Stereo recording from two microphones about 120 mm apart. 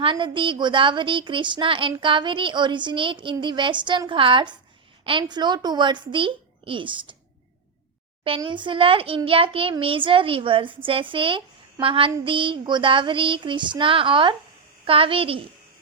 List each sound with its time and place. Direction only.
0.0 s a woman's voice: 45° right (ahead or behind)
8.4 s speech: 40° right (ahead or behind)